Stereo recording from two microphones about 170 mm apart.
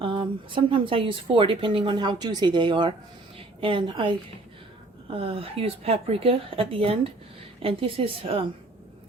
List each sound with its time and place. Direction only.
0.0 s speech: 30° right (ahead or behind)
3.3 s a sound: 30° right (ahead or behind)
5.1 s speech: 35° right (ahead or behind)